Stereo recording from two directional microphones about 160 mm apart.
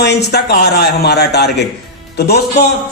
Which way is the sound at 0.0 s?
90° left.